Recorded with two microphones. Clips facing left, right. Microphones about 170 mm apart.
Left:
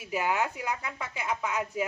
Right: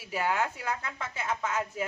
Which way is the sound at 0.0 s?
15° left (ahead or behind).